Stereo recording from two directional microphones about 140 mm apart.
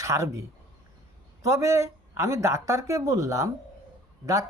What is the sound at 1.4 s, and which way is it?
Speech, 20° right (ahead or behind).